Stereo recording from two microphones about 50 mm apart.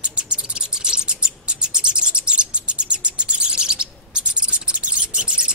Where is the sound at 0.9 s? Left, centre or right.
Centre.